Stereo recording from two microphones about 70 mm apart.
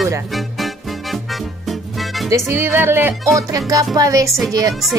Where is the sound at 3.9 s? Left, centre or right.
Right.